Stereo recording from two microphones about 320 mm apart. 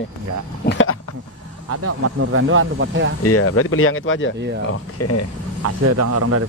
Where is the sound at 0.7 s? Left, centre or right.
Left.